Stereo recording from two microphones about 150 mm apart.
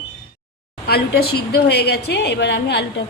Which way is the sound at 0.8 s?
90° left.